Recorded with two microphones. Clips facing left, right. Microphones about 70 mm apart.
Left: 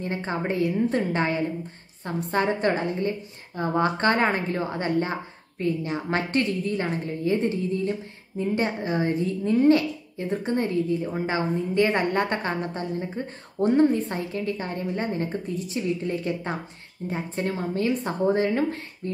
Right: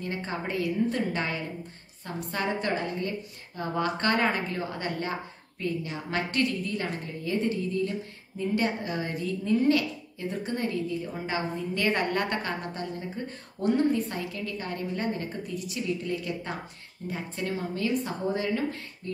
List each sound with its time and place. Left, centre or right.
0.0 s a woman's voice: left